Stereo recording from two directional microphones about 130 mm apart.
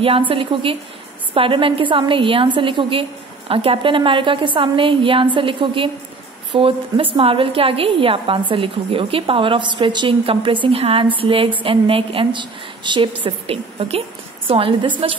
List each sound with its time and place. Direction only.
0.3 s a woman's voice: 45° right (ahead or behind)